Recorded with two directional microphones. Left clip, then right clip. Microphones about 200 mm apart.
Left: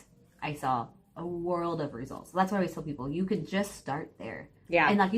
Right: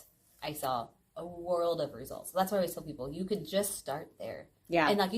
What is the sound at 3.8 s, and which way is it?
Speech, 25° right (ahead or behind).